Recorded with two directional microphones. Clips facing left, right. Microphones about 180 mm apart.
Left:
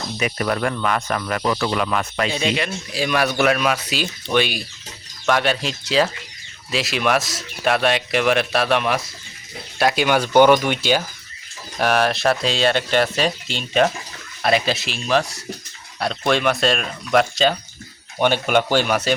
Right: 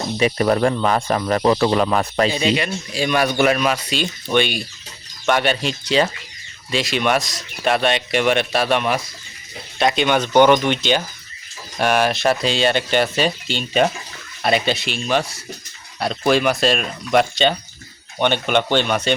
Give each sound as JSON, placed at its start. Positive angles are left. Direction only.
{"t": 0.2, "sound": "speech", "side_deg": -30}
{"t": 2.3, "sound": "speech", "side_deg": 0}